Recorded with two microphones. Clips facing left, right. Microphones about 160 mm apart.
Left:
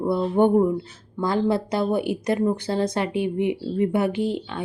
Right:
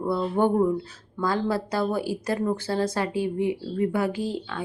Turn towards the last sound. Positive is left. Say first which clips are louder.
# left 4 dB
turn(degrees=25)  # may be behind; listen again after turning